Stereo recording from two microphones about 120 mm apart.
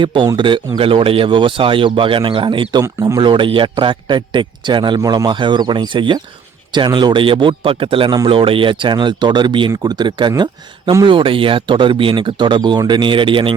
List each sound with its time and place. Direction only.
0.0 s speech: 45° right (ahead or behind)
2.8 s speech: 25° right (ahead or behind)
3.2 s a man's voice: 40° right (ahead or behind)